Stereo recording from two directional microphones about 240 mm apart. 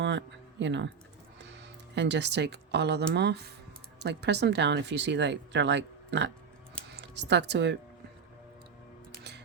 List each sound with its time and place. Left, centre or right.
0.0 s music: right
2.0 s speech: right